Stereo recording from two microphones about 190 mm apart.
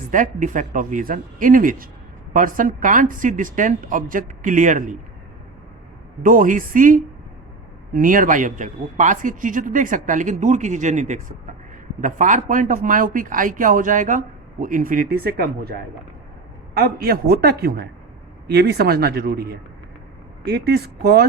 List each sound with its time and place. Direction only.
0.1 s speech: 40° right (ahead or behind)
6.2 s speech: 45° right (ahead or behind)